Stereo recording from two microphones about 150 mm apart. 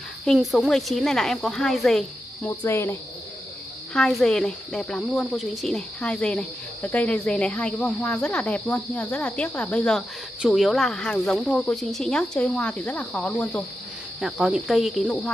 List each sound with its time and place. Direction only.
0.2 s speech: centre (ahead or behind)
2.6 s speech: 15° left (ahead or behind)
3.9 s speech: 5° left (ahead or behind)
14.2 s speech: centre (ahead or behind)